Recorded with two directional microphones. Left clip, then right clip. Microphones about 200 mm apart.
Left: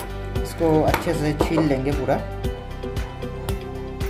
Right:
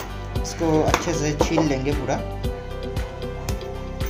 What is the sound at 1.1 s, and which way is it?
Speech, 25° left (ahead or behind).